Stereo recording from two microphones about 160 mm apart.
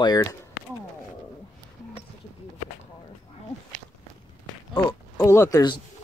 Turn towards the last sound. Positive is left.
turn(degrees=20)  # may be behind; listen again after turning